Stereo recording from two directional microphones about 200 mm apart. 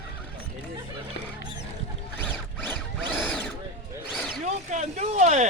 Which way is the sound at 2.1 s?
10° left (ahead or behind).